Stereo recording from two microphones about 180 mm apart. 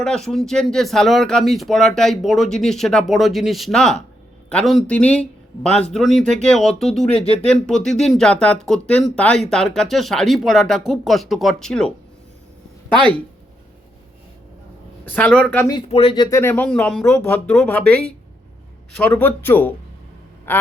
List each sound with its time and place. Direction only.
0.0 s speech: 5° left (ahead or behind)
7.1 s speech: 30° left (ahead or behind)
7.5 s speech: 5° left (ahead or behind)
15.0 s speech: 10° left (ahead or behind)
15.9 s speech: 35° left (ahead or behind)
16.1 s speech: 20° left (ahead or behind)
20.5 s quack: 10° left (ahead or behind)